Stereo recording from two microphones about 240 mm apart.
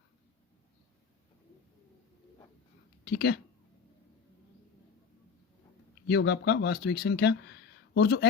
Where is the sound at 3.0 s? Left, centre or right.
Left.